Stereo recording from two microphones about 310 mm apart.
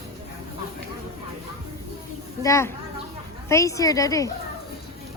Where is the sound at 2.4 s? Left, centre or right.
Centre.